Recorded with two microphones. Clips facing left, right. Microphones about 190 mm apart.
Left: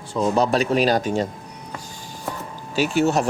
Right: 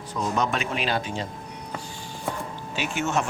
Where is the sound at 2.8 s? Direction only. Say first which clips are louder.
Left 8 dB; 35° left (ahead or behind).